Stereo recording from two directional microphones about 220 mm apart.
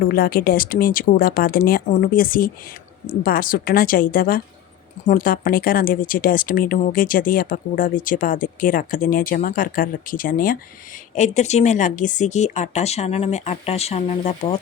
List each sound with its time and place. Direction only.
0.1 s a woman's voice: 40° left (ahead or behind)